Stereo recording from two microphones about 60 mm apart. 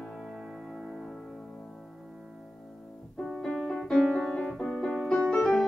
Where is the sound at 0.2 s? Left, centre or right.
Centre.